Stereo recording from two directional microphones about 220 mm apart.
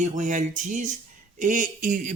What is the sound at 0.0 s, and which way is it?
Speech, 35° right (ahead or behind).